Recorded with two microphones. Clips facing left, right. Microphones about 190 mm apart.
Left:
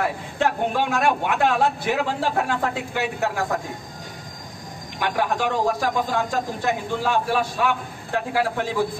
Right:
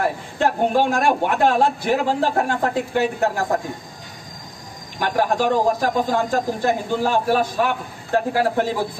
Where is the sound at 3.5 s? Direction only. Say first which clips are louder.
Right 4 dB; 40° right (ahead or behind).